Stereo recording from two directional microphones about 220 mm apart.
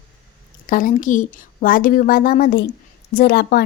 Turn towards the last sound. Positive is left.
turn(degrees=45)  # may be behind; listen again after turning